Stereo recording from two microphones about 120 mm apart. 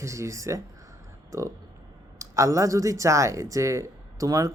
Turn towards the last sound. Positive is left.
turn(degrees=-25)  # may be behind; listen again after turning